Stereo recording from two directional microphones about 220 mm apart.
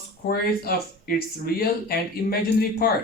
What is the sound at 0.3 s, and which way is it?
Speech, 45° left (ahead or behind).